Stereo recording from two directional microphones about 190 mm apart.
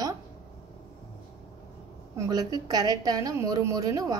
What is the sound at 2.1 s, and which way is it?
A woman's voice, 20° right (ahead or behind).